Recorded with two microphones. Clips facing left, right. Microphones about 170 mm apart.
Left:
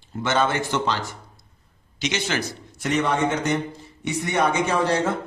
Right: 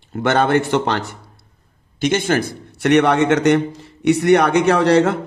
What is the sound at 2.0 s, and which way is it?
A man's voice, 50° right (ahead or behind).